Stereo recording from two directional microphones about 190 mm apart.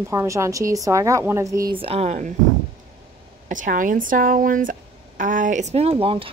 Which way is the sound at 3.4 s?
45° right (ahead or behind).